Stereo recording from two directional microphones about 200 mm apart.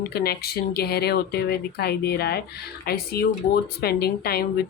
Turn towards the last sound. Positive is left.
turn(degrees=50)  # may be behind; listen again after turning